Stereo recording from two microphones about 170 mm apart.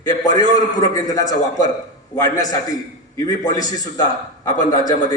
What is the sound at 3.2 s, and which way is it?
A man's voice, 20° left (ahead or behind).